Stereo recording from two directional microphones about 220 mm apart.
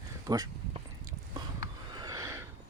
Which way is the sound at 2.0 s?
15° right (ahead or behind).